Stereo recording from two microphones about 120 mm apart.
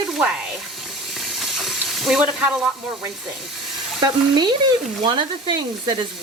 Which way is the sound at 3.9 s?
40° right (ahead or behind).